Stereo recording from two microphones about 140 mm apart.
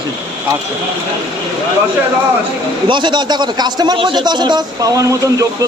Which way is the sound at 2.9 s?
35° right (ahead or behind).